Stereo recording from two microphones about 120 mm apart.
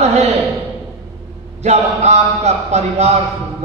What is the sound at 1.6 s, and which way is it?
A man's voice, 65° right (ahead or behind).